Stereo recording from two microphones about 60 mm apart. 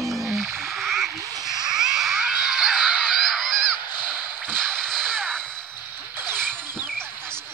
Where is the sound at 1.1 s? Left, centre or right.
Right.